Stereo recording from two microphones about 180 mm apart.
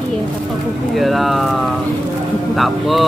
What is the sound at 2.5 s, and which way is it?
Speech, centre (ahead or behind).